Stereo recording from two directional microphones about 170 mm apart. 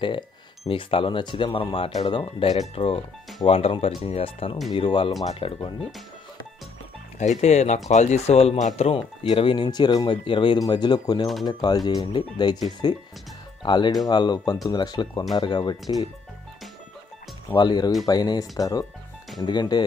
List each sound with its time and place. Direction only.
0.7 s speech: 30° left (ahead or behind)
7.2 s speech: 45° left (ahead or behind); by 16.1 s 25° left (ahead or behind)
17.6 s speech: 25° left (ahead or behind)